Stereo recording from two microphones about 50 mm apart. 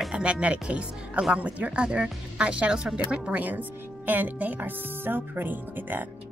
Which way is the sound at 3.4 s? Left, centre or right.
Right.